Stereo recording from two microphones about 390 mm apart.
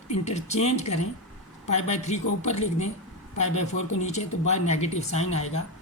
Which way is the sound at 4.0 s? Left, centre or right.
Centre.